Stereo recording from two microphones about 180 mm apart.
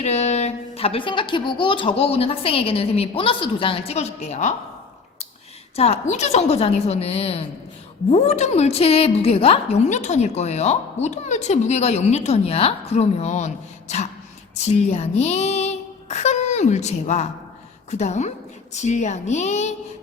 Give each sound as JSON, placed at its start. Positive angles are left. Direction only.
{"t": 0.0, "sound": "a woman's voice", "side_deg": 40}
{"t": 5.7, "sound": "a woman's voice", "side_deg": 35}